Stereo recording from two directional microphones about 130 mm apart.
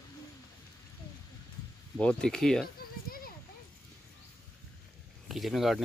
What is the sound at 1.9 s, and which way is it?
Speech, 5° left (ahead or behind).